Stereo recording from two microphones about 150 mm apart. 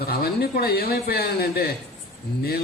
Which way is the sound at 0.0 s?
90° left.